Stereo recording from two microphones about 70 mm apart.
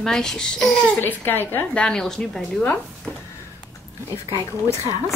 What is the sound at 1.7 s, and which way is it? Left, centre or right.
Speech, centre.